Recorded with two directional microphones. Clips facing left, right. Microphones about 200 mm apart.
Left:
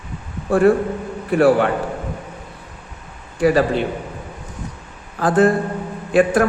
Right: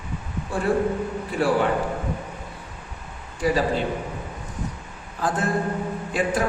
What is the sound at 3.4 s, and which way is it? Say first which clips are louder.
Speech: left 7 dB; 65° left (ahead or behind).